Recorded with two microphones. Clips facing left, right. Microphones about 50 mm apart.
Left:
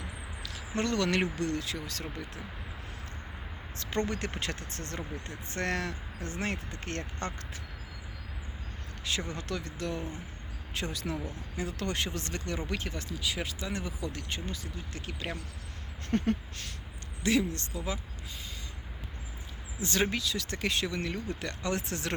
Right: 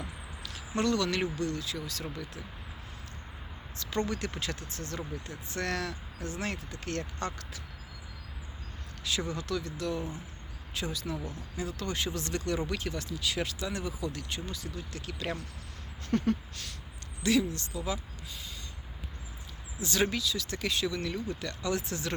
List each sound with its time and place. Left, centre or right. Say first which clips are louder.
0.0 s a sound: even; centre
0.8 s speech: even; left
3.8 s speech: even; left
9.3 s speech: right 2 dB; left
13.1 s speech: right 1 dB; centre
16.0 s speech: right 1 dB; left
19.8 s speech: even; left